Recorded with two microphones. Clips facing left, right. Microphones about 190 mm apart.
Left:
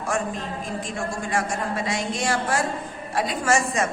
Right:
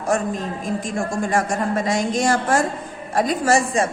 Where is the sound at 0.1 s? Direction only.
40° right (ahead or behind).